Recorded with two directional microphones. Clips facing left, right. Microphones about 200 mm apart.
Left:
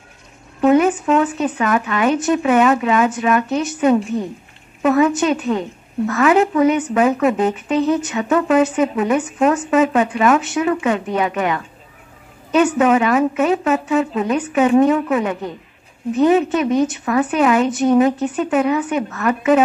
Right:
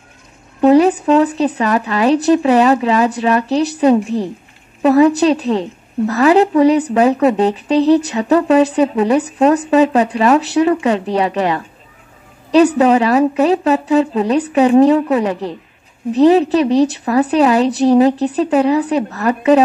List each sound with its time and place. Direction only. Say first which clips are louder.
0.6 s a woman's voice: right 4 dB; 35° right (ahead or behind)